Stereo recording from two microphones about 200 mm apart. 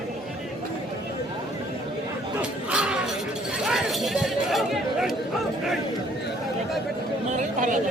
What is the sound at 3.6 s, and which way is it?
Chatter, centre (ahead or behind).